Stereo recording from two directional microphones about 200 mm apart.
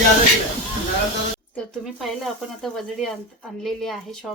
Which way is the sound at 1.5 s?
Centre (ahead or behind).